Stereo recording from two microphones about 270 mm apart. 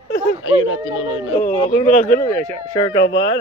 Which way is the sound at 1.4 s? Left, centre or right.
Left.